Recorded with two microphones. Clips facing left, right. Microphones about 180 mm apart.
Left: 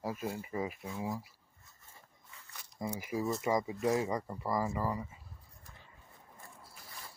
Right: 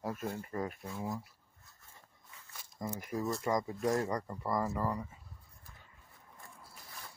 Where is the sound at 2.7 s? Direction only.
10° left (ahead or behind).